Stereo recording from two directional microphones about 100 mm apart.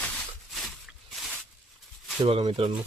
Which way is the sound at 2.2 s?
85° right.